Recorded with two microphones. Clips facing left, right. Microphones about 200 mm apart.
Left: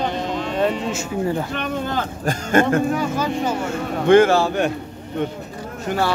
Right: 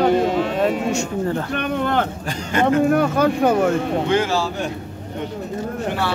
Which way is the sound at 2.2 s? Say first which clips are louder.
Left 2 dB; 50° left (ahead or behind).